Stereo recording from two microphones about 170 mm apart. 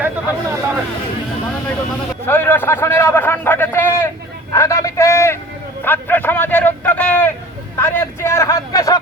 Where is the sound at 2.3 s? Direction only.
15° left (ahead or behind).